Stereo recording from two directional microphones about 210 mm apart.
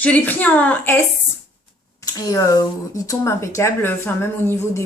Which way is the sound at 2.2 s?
20° left (ahead or behind).